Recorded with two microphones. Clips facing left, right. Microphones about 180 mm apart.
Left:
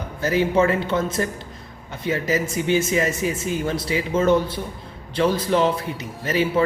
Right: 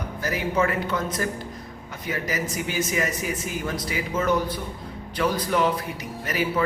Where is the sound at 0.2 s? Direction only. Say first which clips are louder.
Left 6 dB; 25° left (ahead or behind).